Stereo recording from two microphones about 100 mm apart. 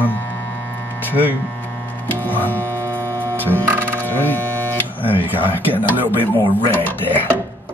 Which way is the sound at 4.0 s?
20° left (ahead or behind).